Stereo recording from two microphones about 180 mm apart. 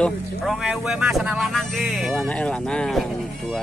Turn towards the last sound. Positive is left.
turn(degrees=0)  # may be behind; listen again after turning